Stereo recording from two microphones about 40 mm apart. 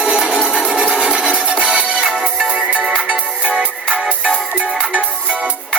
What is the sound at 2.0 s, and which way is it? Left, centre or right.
Music, right.